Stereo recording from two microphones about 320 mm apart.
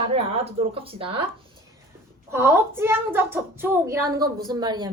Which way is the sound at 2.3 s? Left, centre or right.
Centre.